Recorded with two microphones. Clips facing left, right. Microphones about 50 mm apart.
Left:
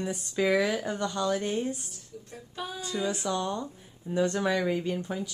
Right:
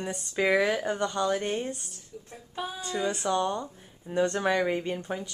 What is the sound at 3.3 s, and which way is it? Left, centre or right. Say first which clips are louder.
Speech: right 3 dB; centre.